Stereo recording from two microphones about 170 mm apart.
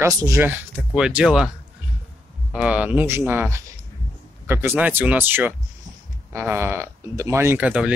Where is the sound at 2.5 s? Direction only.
10° right (ahead or behind).